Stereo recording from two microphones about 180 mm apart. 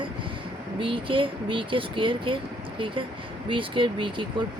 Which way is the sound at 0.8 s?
30° right (ahead or behind).